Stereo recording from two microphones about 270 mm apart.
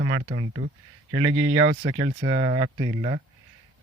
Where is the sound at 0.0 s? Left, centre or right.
Right.